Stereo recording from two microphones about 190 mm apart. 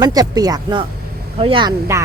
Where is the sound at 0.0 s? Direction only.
20° right (ahead or behind).